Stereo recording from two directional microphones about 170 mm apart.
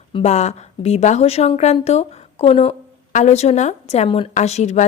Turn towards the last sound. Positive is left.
turn(degrees=40)  # may be behind; listen again after turning